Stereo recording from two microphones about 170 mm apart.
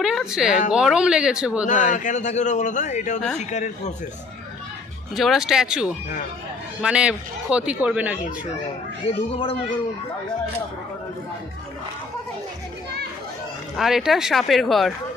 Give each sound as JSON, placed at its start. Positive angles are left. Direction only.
{"t": 0.0, "sound": "speech", "side_deg": -5}
{"t": 1.7, "sound": "a man's voice", "side_deg": 45}
{"t": 5.1, "sound": "a man's voice", "side_deg": 0}
{"t": 9.0, "sound": "speech", "side_deg": 35}
{"t": 13.7, "sound": "speech", "side_deg": 0}